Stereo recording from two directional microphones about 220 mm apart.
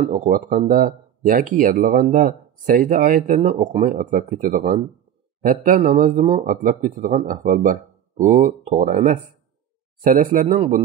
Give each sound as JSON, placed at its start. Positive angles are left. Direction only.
{"t": 0.1, "sound": "speech", "side_deg": -40}